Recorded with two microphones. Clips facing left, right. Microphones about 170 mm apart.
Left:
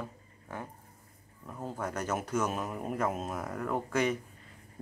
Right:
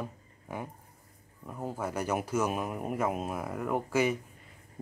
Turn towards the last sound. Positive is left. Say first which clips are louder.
# right 2 dB
turn(degrees=-5)  # may be behind; listen again after turning